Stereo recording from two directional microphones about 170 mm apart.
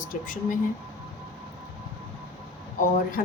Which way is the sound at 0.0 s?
50° left (ahead or behind).